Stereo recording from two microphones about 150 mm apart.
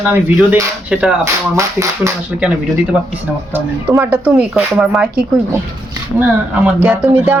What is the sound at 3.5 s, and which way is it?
Speech, 15° right (ahead or behind).